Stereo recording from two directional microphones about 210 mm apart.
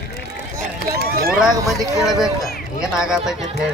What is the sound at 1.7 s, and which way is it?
Speech, centre (ahead or behind).